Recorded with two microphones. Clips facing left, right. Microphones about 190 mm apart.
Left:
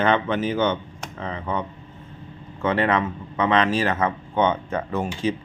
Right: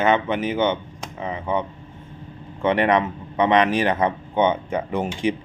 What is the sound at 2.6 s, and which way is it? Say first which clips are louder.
Speech: right 3 dB; 15° right (ahead or behind).